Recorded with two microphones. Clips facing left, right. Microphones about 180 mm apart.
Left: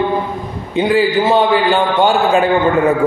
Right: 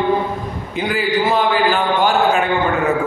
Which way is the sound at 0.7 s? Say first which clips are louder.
Left 6 dB; 25° left (ahead or behind).